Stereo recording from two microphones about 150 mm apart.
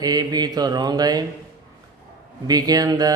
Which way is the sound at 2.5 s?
25° right (ahead or behind).